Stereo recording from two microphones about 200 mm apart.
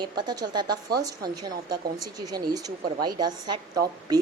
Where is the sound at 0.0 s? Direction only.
20° right (ahead or behind).